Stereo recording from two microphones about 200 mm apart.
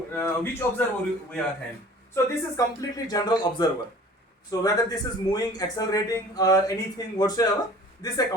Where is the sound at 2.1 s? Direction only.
15° left (ahead or behind).